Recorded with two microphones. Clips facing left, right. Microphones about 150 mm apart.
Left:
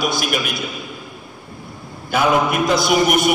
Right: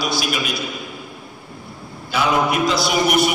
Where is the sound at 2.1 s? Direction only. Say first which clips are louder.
Left 2 dB; 50° left (ahead or behind).